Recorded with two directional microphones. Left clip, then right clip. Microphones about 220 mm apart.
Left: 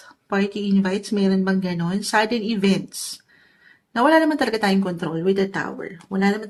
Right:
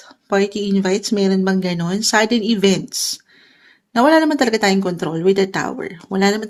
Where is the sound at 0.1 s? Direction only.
30° right (ahead or behind).